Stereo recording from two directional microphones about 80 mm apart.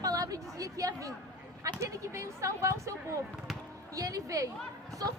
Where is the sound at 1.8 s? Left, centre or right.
Right.